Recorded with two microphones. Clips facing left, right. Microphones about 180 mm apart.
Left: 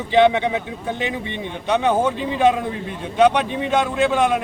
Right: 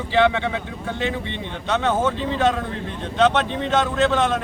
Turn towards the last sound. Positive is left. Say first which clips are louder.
# left 1 dB
turn(degrees=10)  # may be behind; listen again after turning